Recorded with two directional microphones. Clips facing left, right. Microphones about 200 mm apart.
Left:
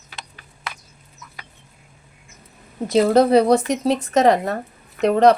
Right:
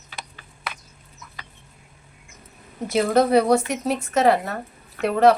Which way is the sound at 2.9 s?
35° left (ahead or behind).